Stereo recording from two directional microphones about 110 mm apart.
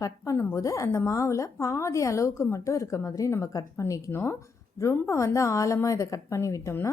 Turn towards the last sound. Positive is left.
turn(degrees=25)  # may be behind; listen again after turning